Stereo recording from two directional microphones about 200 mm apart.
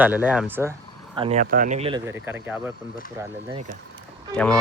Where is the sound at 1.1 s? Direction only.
25° right (ahead or behind).